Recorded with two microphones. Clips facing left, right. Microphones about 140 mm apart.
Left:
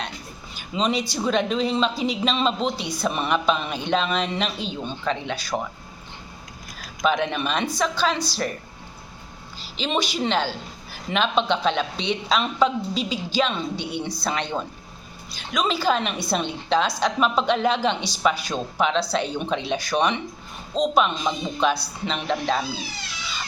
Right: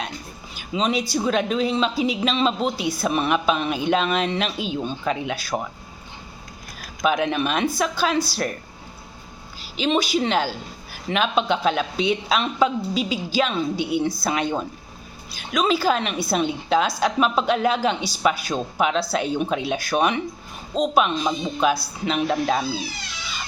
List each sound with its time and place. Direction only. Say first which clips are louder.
0.5 s a sound: right 1 dB; centre (ahead or behind)
1.1 s speech: right 1 dB; 5° right (ahead or behind)
7.0 s speech: right 2 dB; 5° right (ahead or behind)
9.6 s speech: right 4 dB; 5° right (ahead or behind)